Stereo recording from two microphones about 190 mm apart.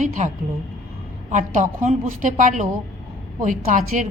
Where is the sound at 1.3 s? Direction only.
40° right (ahead or behind).